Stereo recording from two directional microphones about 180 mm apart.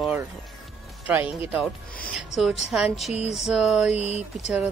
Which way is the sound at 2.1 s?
Centre (ahead or behind).